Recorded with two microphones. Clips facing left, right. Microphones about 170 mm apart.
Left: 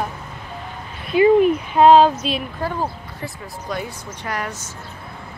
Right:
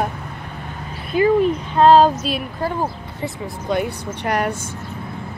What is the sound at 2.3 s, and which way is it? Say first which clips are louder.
Speech: right 1 dB; 15° right (ahead or behind).